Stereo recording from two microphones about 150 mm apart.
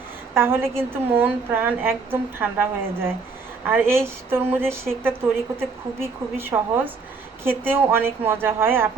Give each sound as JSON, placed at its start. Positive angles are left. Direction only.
{"t": 0.3, "sound": "a woman's voice", "side_deg": -15}